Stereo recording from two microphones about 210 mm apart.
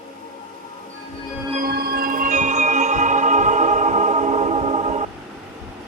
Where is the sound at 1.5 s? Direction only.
45° right (ahead or behind); by 5.0 s 30° right (ahead or behind).